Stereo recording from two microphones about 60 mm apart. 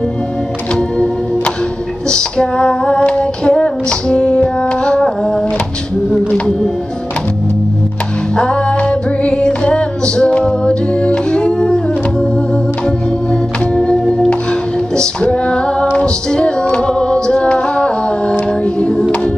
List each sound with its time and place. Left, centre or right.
0.7 s music: centre
2.0 s female singing: centre
3.0 s music: centre
8.4 s music: centre
13.3 s organ: centre
15.2 s music: centre
16.8 s a capella: centre
18.8 s music: centre